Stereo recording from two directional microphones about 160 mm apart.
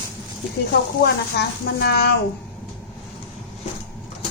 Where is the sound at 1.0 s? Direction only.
90° left.